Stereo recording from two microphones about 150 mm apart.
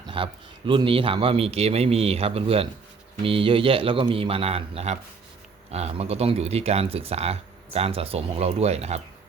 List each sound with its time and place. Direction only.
0.2 s speech: 35° right (ahead or behind)